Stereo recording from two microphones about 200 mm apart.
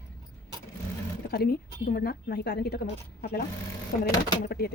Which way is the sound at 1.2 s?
50° left (ahead or behind).